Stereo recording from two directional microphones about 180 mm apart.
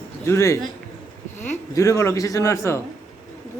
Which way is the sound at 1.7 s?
15° left (ahead or behind).